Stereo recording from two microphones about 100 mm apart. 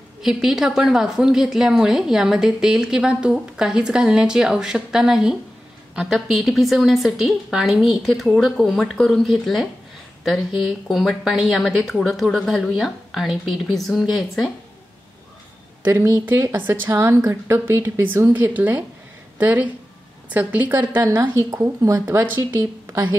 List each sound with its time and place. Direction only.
0.2 s a woman's voice: 5° right (ahead or behind)
15.8 s speech: 30° right (ahead or behind)
21.4 s speech: 35° right (ahead or behind)